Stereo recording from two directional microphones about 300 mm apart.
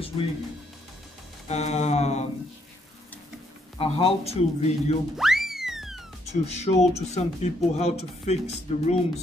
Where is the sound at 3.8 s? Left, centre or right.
Centre.